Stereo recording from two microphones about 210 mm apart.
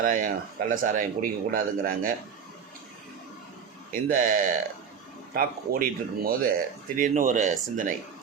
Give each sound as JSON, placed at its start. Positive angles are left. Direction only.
{"t": 0.0, "sound": "a man's voice", "side_deg": -40}
{"t": 3.9, "sound": "a man's voice", "side_deg": -40}